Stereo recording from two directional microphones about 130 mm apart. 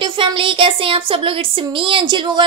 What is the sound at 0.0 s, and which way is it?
A woman's voice, 40° right (ahead or behind).